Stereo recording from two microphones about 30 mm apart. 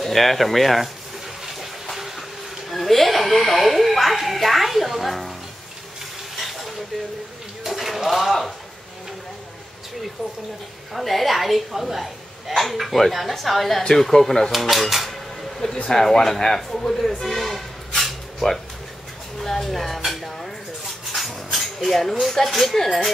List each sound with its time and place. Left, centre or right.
0.0 s a woman's voice: centre
2.7 s a woman's voice: centre
6.3 s stir: centre
7.6 s speech: centre
11.0 s a woman's voice: centre
15.6 s a man's voice: centre
17.2 s a sound: centre
18.4 s speech: left
19.4 s speech: centre
21.1 s a sound: centre
22.4 s a woman's voice: centre